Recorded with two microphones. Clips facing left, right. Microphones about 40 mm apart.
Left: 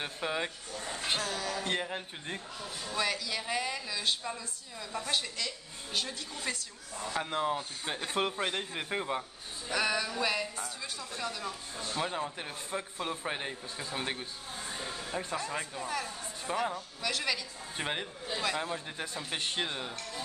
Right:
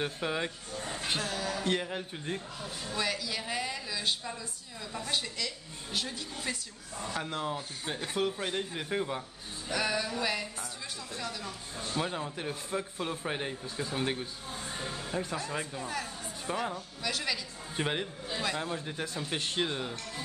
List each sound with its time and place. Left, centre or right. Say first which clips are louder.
0.0 s speech: right 2 dB; centre
0.7 s a sound: right 1 dB; centre
1.0 s speech: even; centre
8.2 s speech: even; left; by 20.0 s centre